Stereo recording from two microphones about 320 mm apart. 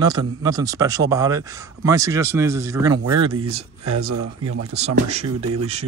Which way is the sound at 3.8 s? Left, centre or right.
Right.